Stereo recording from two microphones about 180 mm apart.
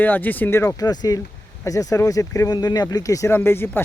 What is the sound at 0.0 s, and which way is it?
Speech, 10° left (ahead or behind).